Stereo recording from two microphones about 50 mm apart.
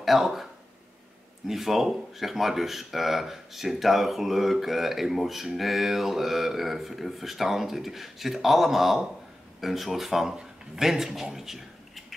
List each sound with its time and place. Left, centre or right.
0.0 s speech: centre
1.5 s speech: centre